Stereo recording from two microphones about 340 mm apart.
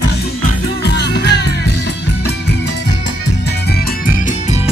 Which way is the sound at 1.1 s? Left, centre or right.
Left.